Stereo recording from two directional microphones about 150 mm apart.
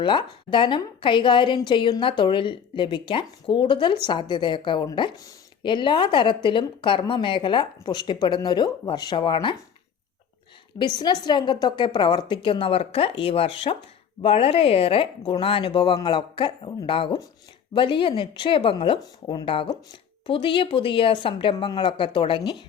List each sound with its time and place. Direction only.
0.0 s a woman's voice: 30° left (ahead or behind)
10.8 s a woman's voice: 30° left (ahead or behind)